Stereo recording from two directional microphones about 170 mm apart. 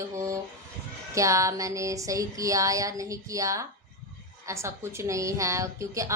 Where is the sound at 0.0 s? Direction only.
20° right (ahead or behind).